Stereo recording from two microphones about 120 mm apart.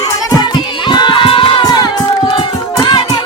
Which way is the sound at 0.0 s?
30° left (ahead or behind).